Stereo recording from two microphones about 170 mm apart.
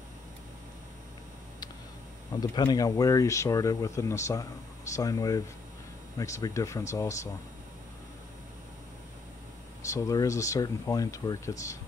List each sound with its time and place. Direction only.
2.4 s speech: 25° left (ahead or behind)
9.8 s speech: 20° left (ahead or behind)